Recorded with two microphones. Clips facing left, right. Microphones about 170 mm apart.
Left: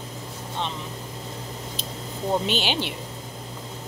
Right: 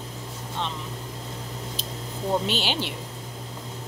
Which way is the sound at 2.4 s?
35° right (ahead or behind).